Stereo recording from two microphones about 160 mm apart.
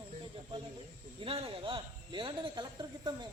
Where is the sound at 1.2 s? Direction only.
35° right (ahead or behind).